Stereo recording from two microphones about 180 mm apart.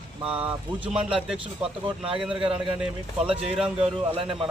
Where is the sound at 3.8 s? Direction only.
30° right (ahead or behind).